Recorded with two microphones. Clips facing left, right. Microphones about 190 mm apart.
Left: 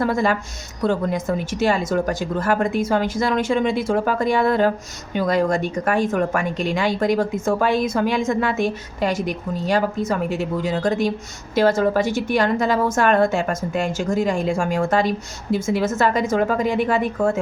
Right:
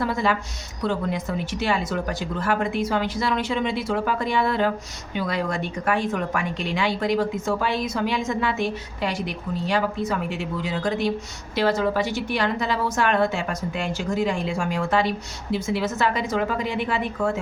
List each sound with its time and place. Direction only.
0.0 s a woman's voice: 45° left (ahead or behind)